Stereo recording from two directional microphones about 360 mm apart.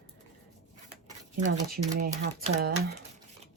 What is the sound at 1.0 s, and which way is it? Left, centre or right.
Speech, centre.